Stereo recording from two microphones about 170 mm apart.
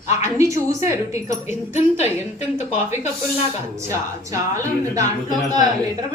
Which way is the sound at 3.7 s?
15° right (ahead or behind).